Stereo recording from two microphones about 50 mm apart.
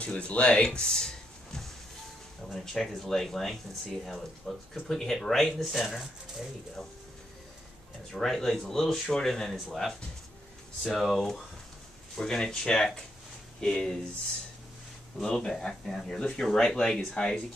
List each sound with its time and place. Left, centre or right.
0.0 s speech: left
0.7 s a sound: centre
2.4 s speech: centre
8.1 s speech: centre
12.2 s speech: centre
15.2 s speech: centre